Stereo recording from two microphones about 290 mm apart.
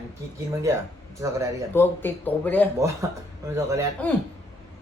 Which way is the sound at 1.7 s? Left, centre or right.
Centre.